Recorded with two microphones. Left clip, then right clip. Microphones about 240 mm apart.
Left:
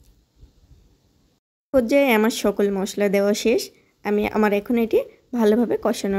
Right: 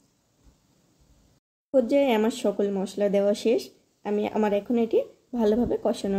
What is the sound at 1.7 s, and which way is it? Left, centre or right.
Speech, left.